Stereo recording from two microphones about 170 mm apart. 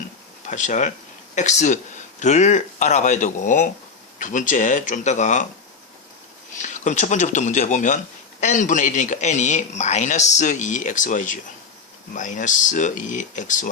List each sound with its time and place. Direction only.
0.4 s a man's voice: 45° left (ahead or behind)
6.6 s a man's voice: 45° left (ahead or behind)